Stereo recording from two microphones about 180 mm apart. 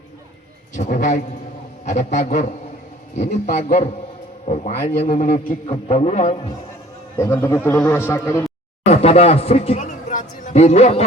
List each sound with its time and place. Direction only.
0.7 s a man's voice: 45° left (ahead or behind)
4.7 s a man's voice: 55° left (ahead or behind)
7.2 s a man's voice: 15° left (ahead or behind)
8.9 s a sound: 35° left (ahead or behind)